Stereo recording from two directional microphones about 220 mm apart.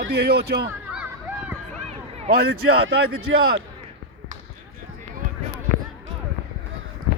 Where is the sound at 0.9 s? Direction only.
5° right (ahead or behind).